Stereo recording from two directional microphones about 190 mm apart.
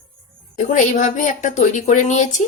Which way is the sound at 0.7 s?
40° left (ahead or behind).